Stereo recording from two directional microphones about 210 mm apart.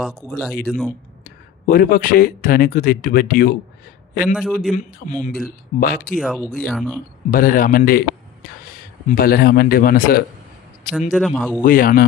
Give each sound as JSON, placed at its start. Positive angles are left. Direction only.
{"t": 0.0, "sound": "speech", "side_deg": 0}
{"t": 1.6, "sound": "a man's voice", "side_deg": 45}
{"t": 4.4, "sound": "speech", "side_deg": 0}
{"t": 5.2, "sound": "speech", "side_deg": 45}
{"t": 6.1, "sound": "speech", "side_deg": 0}
{"t": 7.3, "sound": "speech", "side_deg": 40}
{"t": 9.1, "sound": "speech", "side_deg": 45}
{"t": 11.1, "sound": "speech", "side_deg": 0}
{"t": 11.6, "sound": "speech", "side_deg": 40}